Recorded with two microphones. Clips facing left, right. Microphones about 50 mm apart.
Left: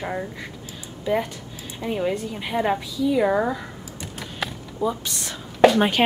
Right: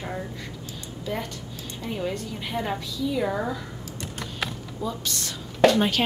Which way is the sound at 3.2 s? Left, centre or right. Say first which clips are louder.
Left 6 dB; left.